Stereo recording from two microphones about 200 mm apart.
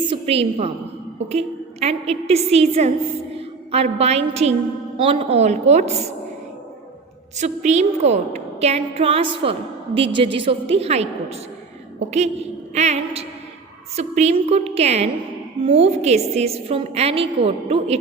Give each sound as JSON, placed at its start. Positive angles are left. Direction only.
{"t": 0.0, "sound": "a sound", "side_deg": -25}
{"t": 1.3, "sound": "a woman's voice", "side_deg": -30}
{"t": 7.3, "sound": "a woman's voice", "side_deg": -35}